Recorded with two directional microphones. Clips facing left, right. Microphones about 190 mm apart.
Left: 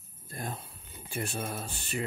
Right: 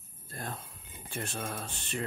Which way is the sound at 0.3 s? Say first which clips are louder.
Left 2 dB; 10° left (ahead or behind).